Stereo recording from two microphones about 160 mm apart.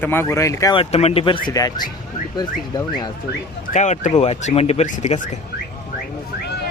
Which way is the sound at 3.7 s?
50° left (ahead or behind).